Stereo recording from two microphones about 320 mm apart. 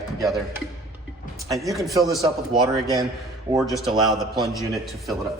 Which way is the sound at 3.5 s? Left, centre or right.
Centre.